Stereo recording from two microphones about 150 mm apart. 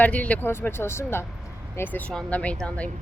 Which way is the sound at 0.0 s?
10° left (ahead or behind).